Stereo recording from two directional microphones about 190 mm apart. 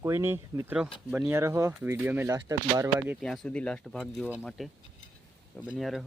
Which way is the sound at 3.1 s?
Centre (ahead or behind).